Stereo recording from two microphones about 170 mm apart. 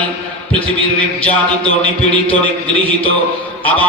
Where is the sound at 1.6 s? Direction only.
30° right (ahead or behind).